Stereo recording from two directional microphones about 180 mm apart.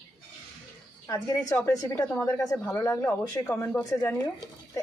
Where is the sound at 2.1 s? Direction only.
10° left (ahead or behind).